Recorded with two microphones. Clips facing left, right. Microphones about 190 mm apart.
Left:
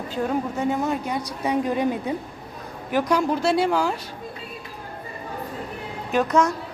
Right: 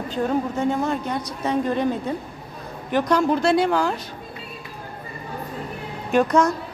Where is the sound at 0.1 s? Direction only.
10° left (ahead or behind).